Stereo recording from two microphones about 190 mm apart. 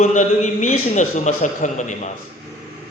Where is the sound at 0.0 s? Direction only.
40° left (ahead or behind).